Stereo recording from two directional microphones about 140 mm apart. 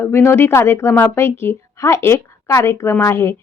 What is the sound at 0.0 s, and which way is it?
A woman's voice, 15° left (ahead or behind).